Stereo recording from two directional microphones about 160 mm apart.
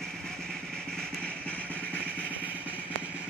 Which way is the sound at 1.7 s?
10° right (ahead or behind).